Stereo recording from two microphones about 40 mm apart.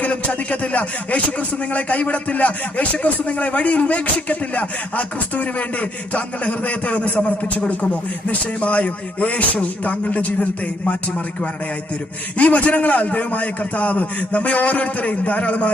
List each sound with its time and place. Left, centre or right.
0.5 s a man's voice: left
6.1 s a man's voice: left
12.4 s a man's voice: left